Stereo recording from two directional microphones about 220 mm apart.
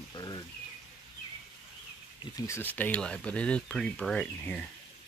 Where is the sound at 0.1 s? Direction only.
20° left (ahead or behind).